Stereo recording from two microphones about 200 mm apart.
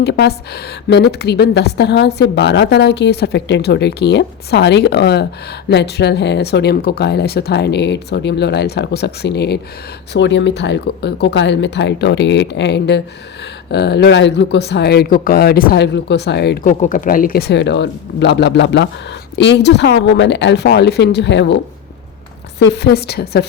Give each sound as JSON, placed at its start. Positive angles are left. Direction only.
{"t": 0.0, "sound": "a woman's voice", "side_deg": 55}
{"t": 16.6, "sound": "a woman's voice", "side_deg": 40}